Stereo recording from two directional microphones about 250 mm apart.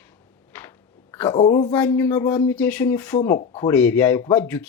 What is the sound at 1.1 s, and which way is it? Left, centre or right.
A woman's voice, centre.